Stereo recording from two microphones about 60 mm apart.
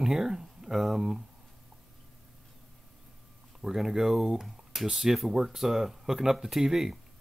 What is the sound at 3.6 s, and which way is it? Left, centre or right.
Speech, centre.